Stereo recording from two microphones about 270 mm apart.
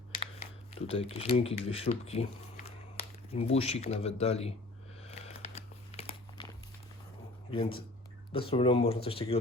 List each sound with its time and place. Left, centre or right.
0.9 s speech: left
5.0 s a sound: left
7.5 s speech: left